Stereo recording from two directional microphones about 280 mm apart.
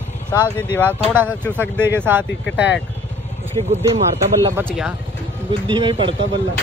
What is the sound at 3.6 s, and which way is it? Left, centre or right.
Speech, right.